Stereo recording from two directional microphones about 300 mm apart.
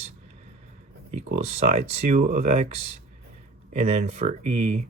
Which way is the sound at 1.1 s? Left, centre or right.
Right.